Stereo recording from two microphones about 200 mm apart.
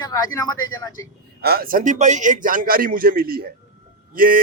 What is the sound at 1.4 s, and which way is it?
Speech, 50° right (ahead or behind).